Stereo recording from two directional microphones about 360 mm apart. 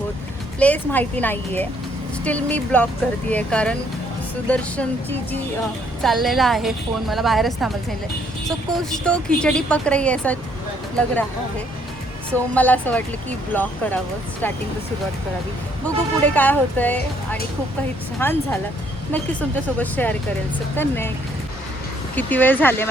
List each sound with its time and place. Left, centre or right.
0.6 s a woman's voice: centre
6.0 s a woman's voice: centre
12.3 s a woman's voice: centre
16.2 s a woman's voice: centre
18.2 s a woman's voice: centre
22.1 s a woman's voice: centre